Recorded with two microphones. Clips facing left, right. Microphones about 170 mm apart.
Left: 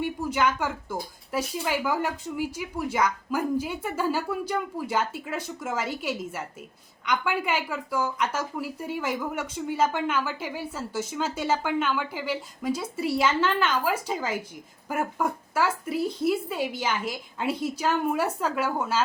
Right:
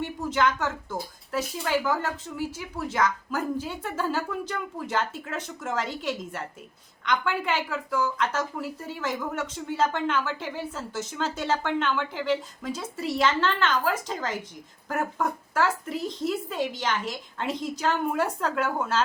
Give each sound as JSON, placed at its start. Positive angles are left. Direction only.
{"t": 0.0, "sound": "a woman's voice", "side_deg": 10}